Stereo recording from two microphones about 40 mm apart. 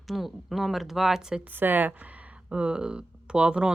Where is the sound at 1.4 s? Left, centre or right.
Right.